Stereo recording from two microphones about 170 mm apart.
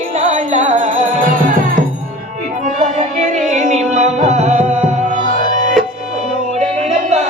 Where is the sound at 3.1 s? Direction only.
45° right (ahead or behind).